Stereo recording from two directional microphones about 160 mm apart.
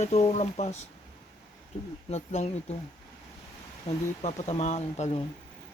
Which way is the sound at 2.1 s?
45° left (ahead or behind).